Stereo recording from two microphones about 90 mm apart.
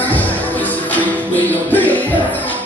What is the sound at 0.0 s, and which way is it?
Music, 20° left (ahead or behind).